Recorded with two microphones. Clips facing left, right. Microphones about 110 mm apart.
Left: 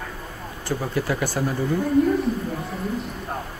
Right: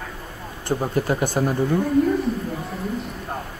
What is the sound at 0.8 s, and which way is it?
Speech, 35° right (ahead or behind).